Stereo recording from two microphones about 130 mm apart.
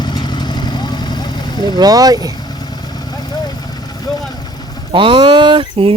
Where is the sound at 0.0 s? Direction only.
35° left (ahead or behind).